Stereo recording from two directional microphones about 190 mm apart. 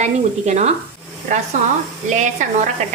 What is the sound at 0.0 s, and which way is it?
Speech, 35° right (ahead or behind).